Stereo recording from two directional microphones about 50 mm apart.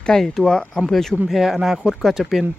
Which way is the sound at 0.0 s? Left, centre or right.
Centre.